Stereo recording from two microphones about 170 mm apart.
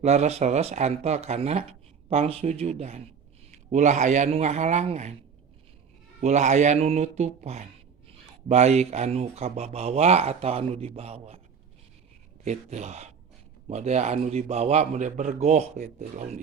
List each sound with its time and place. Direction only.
0.0 s speech: 40° right (ahead or behind)
6.2 s speech: 45° right (ahead or behind)
12.5 s speech: 40° right (ahead or behind)